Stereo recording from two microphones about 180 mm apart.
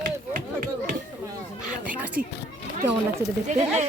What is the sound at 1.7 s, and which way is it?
Speech, 10° right (ahead or behind).